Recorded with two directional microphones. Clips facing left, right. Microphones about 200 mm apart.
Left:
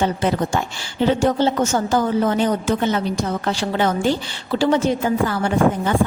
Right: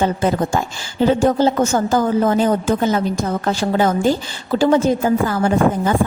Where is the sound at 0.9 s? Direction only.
40° right (ahead or behind).